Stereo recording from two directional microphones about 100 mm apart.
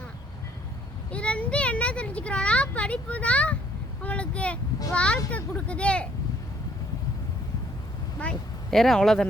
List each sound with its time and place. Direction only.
1.1 s speech: 10° left (ahead or behind)
8.2 s speech: 5° left (ahead or behind)